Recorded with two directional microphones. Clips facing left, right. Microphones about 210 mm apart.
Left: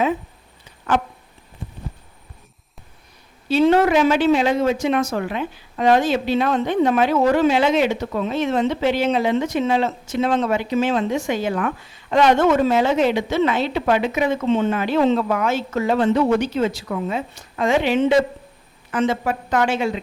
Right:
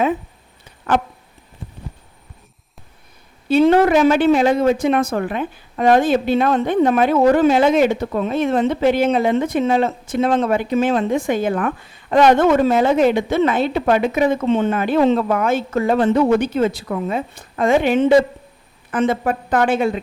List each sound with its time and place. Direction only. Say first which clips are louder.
3.5 s a woman's voice: right 3 dB; 55° right (ahead or behind)